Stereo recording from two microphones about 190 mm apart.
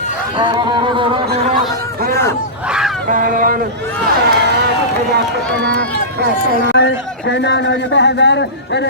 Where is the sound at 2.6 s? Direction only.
5° right (ahead or behind).